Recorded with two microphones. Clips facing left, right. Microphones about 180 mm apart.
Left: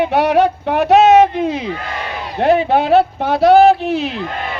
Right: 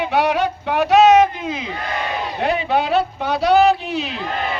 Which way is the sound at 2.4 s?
55° left (ahead or behind).